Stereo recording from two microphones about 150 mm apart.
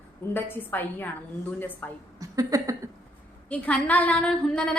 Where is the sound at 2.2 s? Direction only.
25° right (ahead or behind).